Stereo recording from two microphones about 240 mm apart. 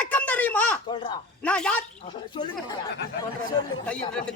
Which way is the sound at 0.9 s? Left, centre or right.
Left.